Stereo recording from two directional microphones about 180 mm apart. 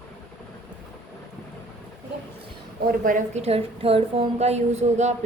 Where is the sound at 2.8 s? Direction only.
50° right (ahead or behind).